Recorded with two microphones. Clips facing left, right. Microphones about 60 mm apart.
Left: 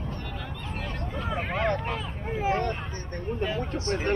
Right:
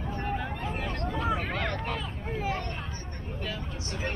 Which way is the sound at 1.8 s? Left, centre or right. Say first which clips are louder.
Left 2 dB; centre.